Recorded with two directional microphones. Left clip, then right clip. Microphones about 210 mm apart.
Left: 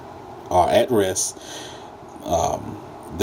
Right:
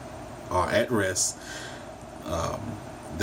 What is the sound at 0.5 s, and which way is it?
Speech, 20° left (ahead or behind).